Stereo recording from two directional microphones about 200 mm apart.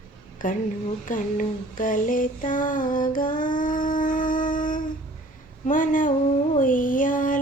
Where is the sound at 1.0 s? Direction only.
40° left (ahead or behind).